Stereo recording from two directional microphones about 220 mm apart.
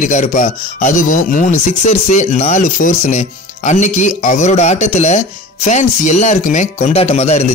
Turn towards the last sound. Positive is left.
turn(degrees=30)  # may be behind; listen again after turning